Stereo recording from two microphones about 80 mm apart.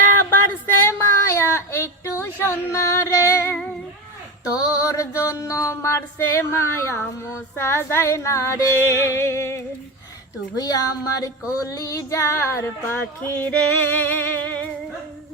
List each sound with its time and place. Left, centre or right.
0.3 s a sound: left
4.9 s mantra: left
5.5 s female singing: left
10.6 s mantra: left
11.5 s female singing: left; by 14.7 s centre